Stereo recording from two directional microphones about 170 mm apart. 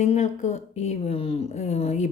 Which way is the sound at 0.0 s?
45° left (ahead or behind).